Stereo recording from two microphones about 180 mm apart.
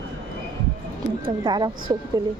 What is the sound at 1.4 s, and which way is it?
Speech, 25° right (ahead or behind).